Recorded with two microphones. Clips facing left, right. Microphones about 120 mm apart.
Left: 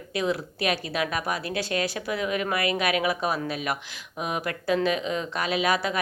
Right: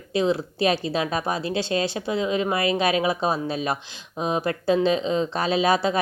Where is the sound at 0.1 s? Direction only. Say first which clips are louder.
Right 5 dB; 25° right (ahead or behind).